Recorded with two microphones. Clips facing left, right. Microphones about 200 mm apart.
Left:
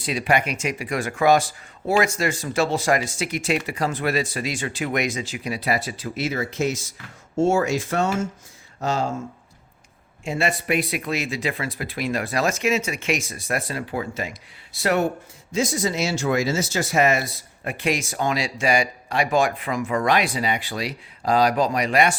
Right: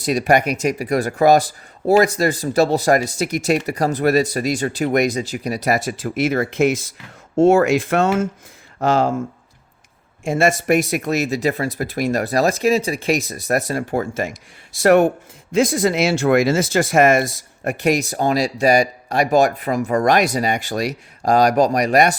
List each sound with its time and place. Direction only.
0.0 s speech: 45° right (ahead or behind)
8.8 s speech: 70° right (ahead or behind)
10.2 s speech: 45° right (ahead or behind)